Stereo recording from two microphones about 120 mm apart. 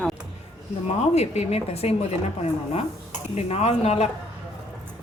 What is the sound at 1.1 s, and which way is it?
A woman's voice, 65° left (ahead or behind).